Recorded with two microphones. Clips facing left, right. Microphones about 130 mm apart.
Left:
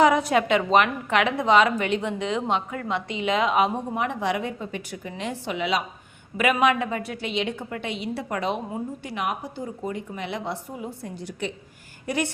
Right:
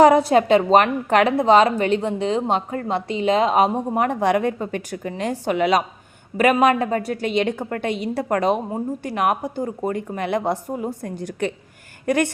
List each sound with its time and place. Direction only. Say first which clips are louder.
0.0 s a woman's voice: right 6 dB; 35° right (ahead or behind); by 12.3 s 55° right (ahead or behind)